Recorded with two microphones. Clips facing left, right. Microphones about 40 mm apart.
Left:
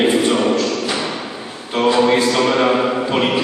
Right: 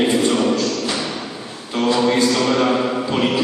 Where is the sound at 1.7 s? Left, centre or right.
Centre.